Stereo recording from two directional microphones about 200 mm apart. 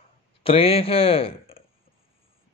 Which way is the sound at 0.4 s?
30° left (ahead or behind).